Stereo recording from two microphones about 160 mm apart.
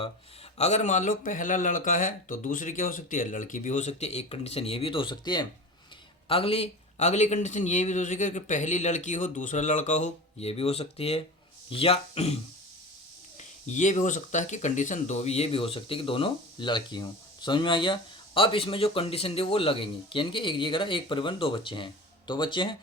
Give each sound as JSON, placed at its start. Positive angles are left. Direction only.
{"t": 0.6, "sound": "speech", "side_deg": 45}
{"t": 13.7, "sound": "speech", "side_deg": 50}